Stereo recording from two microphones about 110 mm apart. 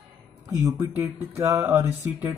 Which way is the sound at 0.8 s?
25° right (ahead or behind).